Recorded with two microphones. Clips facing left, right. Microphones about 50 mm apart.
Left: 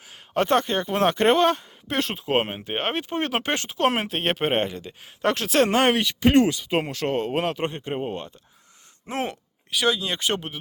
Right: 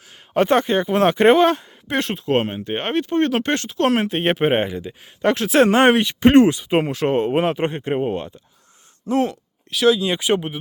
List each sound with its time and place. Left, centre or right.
0.3 s speech: centre
2.2 s speech: centre
4.1 s speech: centre
5.7 s speech: right
7.9 s speech: centre
9.0 s speech: left
9.6 s speech: centre